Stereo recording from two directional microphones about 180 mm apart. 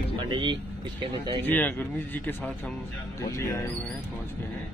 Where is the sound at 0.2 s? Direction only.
25° right (ahead or behind).